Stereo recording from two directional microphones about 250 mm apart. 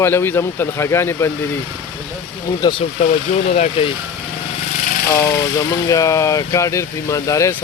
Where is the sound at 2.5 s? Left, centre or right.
Centre.